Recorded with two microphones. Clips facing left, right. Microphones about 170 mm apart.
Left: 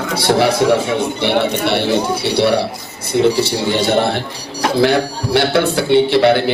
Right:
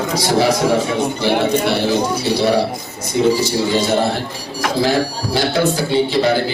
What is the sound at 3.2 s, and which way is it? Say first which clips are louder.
Speech: left 1 dB; 65° left (ahead or behind).